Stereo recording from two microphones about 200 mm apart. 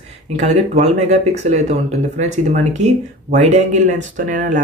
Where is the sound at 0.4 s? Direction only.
35° right (ahead or behind).